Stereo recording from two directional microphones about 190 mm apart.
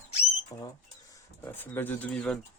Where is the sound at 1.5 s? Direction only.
10° left (ahead or behind).